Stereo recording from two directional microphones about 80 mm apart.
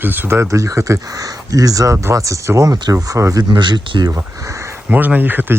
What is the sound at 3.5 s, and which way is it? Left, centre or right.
Speech, right.